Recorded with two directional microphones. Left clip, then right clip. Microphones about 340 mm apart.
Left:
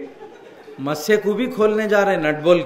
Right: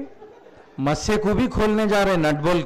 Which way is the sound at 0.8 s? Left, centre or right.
Right.